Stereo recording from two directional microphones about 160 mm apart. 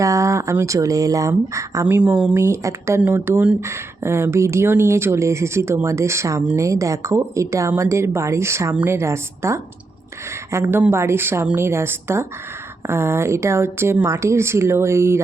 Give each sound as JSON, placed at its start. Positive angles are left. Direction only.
{"t": 0.0, "sound": "speech", "side_deg": -20}